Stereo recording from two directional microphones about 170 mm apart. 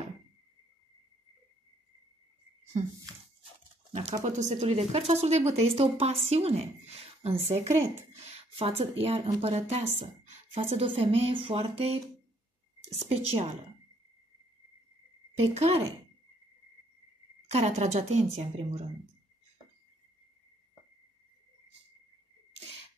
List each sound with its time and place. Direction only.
2.8 s speech: 40° right (ahead or behind)
4.2 s speech: 45° right (ahead or behind)
15.3 s speech: 40° right (ahead or behind)
17.5 s speech: 40° right (ahead or behind)